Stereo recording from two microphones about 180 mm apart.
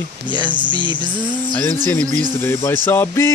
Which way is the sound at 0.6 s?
25° right (ahead or behind).